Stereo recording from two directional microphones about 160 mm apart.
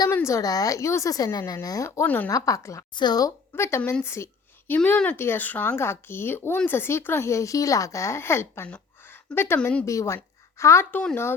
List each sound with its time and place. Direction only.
0.1 s a woman's voice: 15° left (ahead or behind)